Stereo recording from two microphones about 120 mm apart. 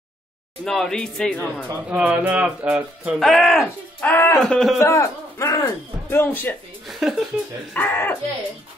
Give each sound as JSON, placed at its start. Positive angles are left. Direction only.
{"t": 0.7, "sound": "speech", "side_deg": 5}
{"t": 1.9, "sound": "speech", "side_deg": -10}
{"t": 3.2, "sound": "speech", "side_deg": 0}
{"t": 4.0, "sound": "speech", "side_deg": 15}
{"t": 4.5, "sound": "speech", "side_deg": 5}
{"t": 4.7, "sound": "speech", "side_deg": 25}
{"t": 6.0, "sound": "speech", "side_deg": 15}
{"t": 6.9, "sound": "speech", "side_deg": 0}
{"t": 7.7, "sound": "speech", "side_deg": 15}